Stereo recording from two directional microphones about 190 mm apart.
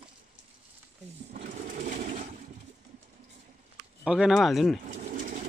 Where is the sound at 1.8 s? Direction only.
40° right (ahead or behind).